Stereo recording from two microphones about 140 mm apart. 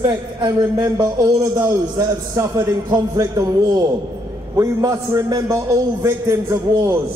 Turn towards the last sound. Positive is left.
turn(degrees=-20)  # may be behind; listen again after turning